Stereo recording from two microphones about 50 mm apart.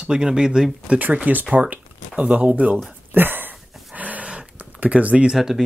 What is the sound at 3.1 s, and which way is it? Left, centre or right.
Dog, right.